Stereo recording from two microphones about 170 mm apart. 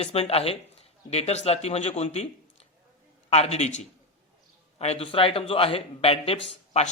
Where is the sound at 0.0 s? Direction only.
35° left (ahead or behind).